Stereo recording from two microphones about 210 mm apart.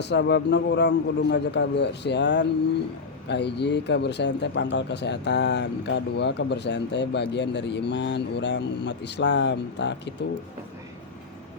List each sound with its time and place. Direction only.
0.0 s speech: 55° left (ahead or behind)